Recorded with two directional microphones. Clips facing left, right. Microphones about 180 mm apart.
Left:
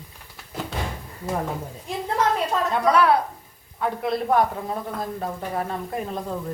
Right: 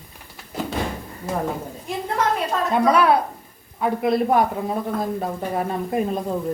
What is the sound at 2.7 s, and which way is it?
Speech, 15° right (ahead or behind).